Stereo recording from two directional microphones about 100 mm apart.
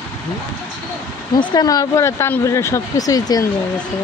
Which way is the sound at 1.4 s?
45° left (ahead or behind).